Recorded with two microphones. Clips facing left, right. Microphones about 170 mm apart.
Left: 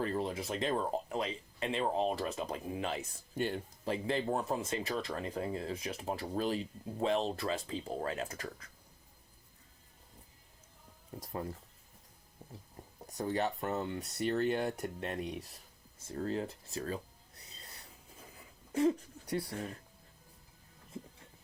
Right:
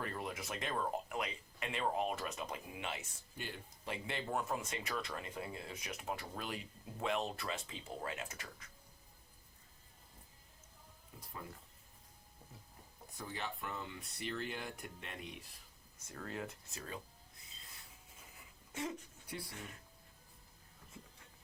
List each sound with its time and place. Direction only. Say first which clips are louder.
0.0 s speech: left 8 dB; 30° left (ahead or behind)
11.1 s speech: left 11 dB; 45° left (ahead or behind)
13.2 s speech: left 11 dB; 45° left (ahead or behind)
18.7 s speech: left 13 dB; 35° left (ahead or behind)